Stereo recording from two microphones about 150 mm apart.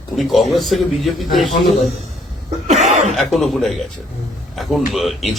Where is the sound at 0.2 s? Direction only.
Centre (ahead or behind).